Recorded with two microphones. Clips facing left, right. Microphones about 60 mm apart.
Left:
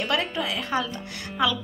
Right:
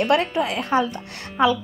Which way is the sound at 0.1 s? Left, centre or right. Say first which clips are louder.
Right 6 dB; right.